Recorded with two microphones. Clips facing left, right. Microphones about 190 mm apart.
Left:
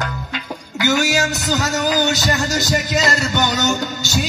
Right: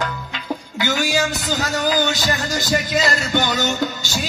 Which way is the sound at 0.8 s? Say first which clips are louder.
Left 3 dB; 45° left (ahead or behind).